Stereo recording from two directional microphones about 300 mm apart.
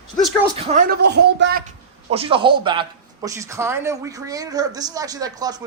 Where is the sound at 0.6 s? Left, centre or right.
Right.